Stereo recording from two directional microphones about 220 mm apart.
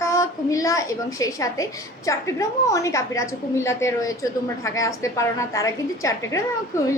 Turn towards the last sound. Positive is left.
turn(degrees=15)  # may be behind; listen again after turning